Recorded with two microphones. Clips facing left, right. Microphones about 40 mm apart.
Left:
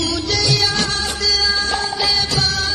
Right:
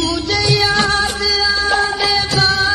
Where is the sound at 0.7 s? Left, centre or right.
Right.